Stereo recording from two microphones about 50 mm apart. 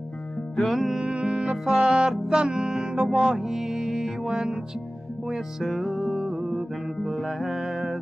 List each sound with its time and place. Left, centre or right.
0.6 s music: centre
1.0 s music: right
7.0 s music: centre